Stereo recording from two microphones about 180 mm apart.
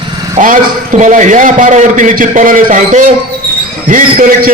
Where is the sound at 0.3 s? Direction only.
50° right (ahead or behind).